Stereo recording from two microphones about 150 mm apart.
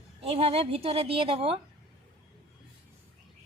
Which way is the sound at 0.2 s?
40° right (ahead or behind).